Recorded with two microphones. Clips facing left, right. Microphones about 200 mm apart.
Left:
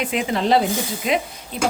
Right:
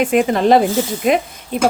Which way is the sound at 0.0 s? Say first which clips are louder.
Right 8 dB; 50° right (ahead or behind).